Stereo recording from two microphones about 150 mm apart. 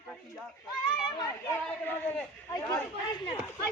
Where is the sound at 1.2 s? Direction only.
20° left (ahead or behind).